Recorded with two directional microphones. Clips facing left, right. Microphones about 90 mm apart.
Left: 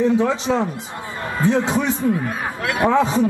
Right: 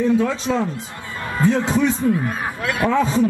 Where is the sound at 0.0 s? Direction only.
20° left (ahead or behind).